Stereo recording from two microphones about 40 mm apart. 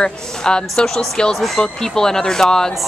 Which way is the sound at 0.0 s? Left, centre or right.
Left.